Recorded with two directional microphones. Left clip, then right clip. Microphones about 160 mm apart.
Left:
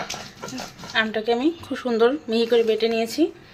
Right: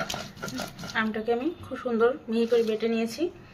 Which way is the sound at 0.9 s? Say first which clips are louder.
Left 6 dB; 30° left (ahead or behind).